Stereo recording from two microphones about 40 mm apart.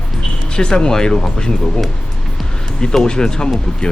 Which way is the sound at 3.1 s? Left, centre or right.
Centre.